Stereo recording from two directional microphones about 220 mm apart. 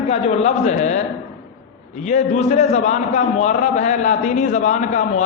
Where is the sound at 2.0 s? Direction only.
35° left (ahead or behind).